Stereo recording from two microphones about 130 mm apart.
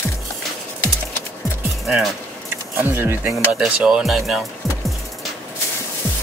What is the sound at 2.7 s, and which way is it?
Speech, 15° right (ahead or behind).